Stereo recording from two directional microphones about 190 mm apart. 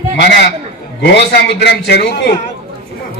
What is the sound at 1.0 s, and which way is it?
A man's voice, 65° left (ahead or behind).